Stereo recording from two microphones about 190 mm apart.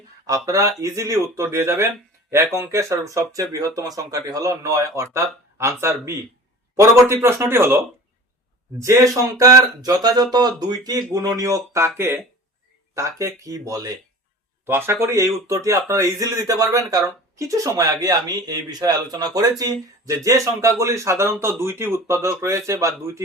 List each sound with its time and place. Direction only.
0.3 s speech: 20° right (ahead or behind)
8.8 s speech: 15° right (ahead or behind)